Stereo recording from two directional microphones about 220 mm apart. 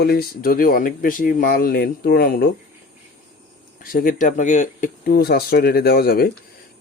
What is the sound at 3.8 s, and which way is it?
Speech, 40° left (ahead or behind).